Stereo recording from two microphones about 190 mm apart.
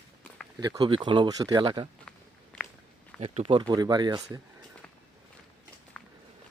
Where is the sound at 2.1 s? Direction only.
5° left (ahead or behind).